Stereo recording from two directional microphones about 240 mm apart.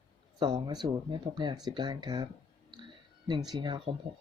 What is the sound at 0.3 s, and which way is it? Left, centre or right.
Speech, centre.